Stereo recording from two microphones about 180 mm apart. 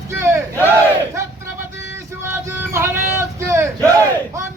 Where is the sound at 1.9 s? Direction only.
15° right (ahead or behind).